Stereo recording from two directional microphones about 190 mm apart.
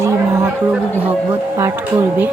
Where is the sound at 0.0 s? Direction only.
15° right (ahead or behind).